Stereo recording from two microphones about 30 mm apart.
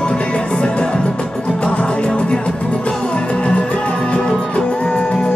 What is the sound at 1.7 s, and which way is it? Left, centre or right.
Music, left.